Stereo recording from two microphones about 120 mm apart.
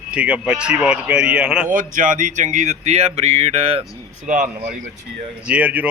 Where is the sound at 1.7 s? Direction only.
90° right; by 3.8 s 55° right (ahead or behind).